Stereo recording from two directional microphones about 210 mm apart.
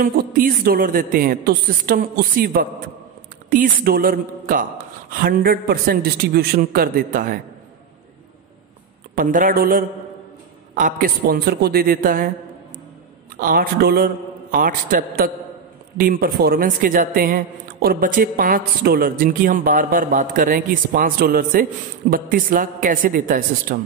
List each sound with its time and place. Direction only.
0.0 s a woman's voice: 40° right (ahead or behind)
9.1 s a man's voice: 40° right (ahead or behind)
13.4 s a woman's voice: 45° right (ahead or behind)